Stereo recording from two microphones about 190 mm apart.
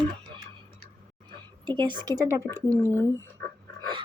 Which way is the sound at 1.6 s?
25° right (ahead or behind).